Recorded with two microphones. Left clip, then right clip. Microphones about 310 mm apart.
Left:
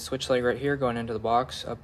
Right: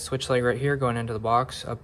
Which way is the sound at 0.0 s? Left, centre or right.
Centre.